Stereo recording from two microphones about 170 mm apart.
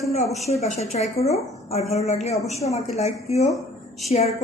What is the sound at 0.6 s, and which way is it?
A woman's voice, 40° left (ahead or behind).